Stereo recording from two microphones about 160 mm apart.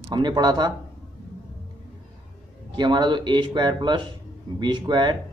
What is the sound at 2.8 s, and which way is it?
A man's voice, 30° right (ahead or behind).